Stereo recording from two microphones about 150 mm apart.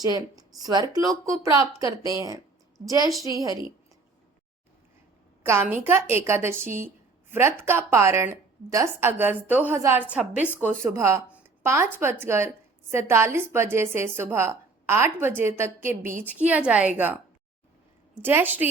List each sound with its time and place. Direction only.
0.0 s a woman's voice: 25° right (ahead or behind)
5.4 s a woman's voice: 15° right (ahead or behind)
18.2 s a woman's voice: 15° right (ahead or behind)